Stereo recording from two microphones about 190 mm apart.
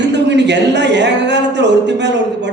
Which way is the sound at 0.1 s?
65° right (ahead or behind).